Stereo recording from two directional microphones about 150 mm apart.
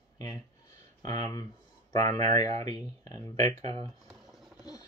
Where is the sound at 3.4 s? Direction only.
40° right (ahead or behind).